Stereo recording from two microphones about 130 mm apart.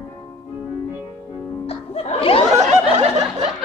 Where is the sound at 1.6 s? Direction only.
50° left (ahead or behind).